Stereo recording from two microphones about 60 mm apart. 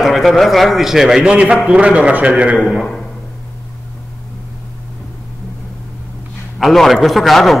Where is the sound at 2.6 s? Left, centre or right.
Centre.